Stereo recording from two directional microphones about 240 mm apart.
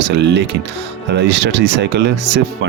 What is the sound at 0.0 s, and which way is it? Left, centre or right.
Speech, right.